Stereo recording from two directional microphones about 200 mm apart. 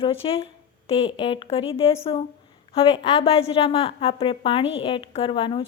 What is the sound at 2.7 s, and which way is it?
A woman's voice, 30° left (ahead or behind).